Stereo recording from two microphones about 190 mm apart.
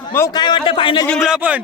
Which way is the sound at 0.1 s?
15° left (ahead or behind).